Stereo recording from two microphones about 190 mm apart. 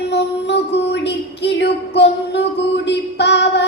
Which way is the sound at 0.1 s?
65° left (ahead or behind).